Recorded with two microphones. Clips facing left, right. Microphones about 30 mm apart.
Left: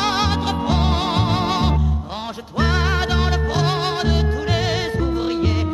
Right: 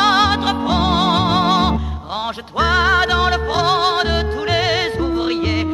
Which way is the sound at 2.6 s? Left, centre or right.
Right.